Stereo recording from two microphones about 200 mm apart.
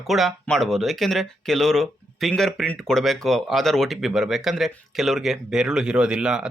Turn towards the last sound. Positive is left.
turn(degrees=-5)  # may be behind; listen again after turning